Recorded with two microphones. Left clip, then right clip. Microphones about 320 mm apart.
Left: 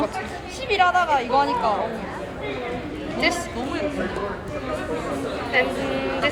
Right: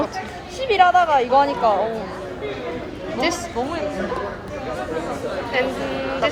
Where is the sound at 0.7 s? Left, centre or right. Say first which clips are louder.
Right 4 dB; right.